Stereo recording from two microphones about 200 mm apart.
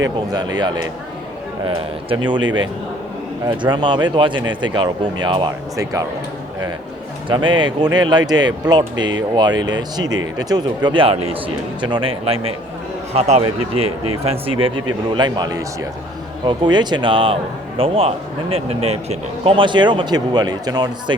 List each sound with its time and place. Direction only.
0.3 s speech: 20° right (ahead or behind)
7.3 s speech: 25° right (ahead or behind)